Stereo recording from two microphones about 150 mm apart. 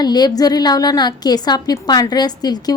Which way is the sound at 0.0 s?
25° left (ahead or behind).